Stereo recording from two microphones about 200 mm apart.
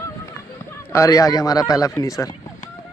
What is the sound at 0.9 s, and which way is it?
Speech, 15° left (ahead or behind).